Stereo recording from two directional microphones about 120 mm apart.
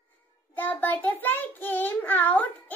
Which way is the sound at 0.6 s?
15° left (ahead or behind).